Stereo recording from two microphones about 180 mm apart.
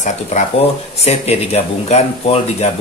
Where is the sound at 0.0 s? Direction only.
40° left (ahead or behind).